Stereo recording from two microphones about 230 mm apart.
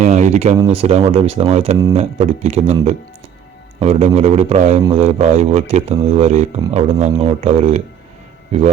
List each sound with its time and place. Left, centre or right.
0.0 s speech: right
3.8 s speech: right